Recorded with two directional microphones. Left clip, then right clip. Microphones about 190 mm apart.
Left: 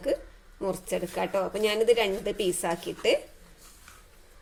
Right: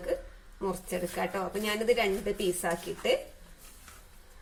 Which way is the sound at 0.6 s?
35° left (ahead or behind).